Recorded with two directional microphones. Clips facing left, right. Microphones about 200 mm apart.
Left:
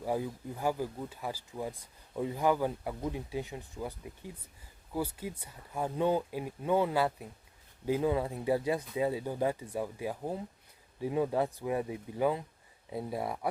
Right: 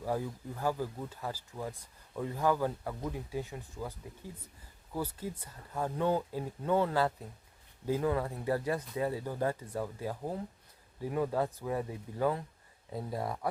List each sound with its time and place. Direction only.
0.0 s speech: 15° left (ahead or behind)